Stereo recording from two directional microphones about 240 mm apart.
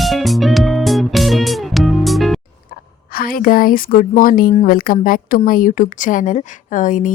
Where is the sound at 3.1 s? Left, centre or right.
Left.